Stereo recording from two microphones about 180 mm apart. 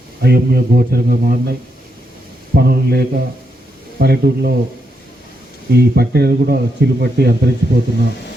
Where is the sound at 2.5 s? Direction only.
60° right (ahead or behind).